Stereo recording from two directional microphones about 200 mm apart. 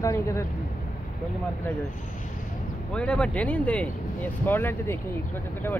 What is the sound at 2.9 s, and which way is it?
Speech, 5° left (ahead or behind).